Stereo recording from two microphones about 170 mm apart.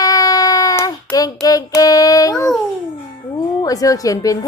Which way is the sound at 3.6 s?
20° left (ahead or behind).